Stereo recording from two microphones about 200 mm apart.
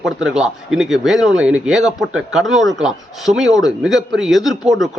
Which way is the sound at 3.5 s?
20° left (ahead or behind).